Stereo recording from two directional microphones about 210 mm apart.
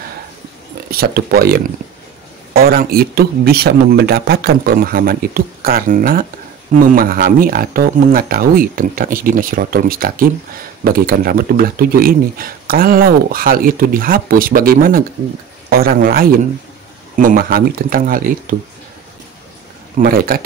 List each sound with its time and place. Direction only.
0.8 s speech: 45° right (ahead or behind)
20.0 s speech: 45° right (ahead or behind)